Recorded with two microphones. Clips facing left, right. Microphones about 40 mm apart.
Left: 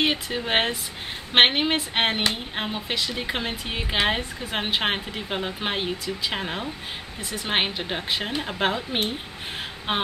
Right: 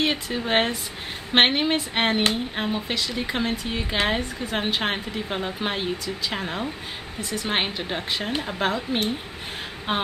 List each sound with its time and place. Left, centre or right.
0.0 s speech: centre